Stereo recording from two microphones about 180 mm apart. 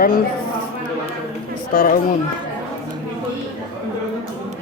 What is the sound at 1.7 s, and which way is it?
Speech, 55° left (ahead or behind).